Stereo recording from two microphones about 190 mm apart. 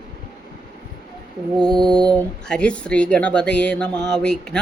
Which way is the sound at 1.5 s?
5° left (ahead or behind).